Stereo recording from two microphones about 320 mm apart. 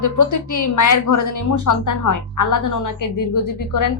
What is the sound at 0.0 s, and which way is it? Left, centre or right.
A woman's voice, left.